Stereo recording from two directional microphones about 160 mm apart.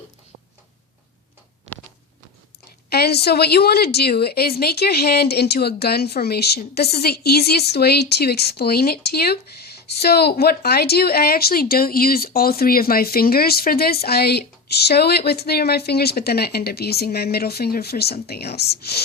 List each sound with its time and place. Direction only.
2.9 s a woman's voice: 85° left